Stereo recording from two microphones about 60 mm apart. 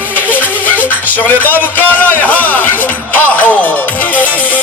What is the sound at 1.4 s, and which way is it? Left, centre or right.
Music, left.